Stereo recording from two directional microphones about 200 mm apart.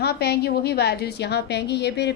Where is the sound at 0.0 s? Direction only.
55° left (ahead or behind).